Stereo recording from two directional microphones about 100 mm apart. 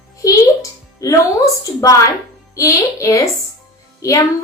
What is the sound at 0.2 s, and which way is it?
Music, 35° left (ahead or behind).